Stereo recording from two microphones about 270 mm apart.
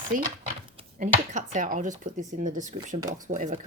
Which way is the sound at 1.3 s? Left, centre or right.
Right.